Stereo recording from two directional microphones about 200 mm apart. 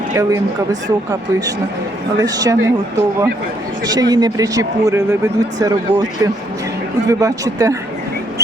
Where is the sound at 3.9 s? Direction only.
20° right (ahead or behind).